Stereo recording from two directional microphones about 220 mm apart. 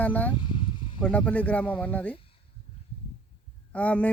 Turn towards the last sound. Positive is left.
turn(degrees=5)  # may be behind; listen again after turning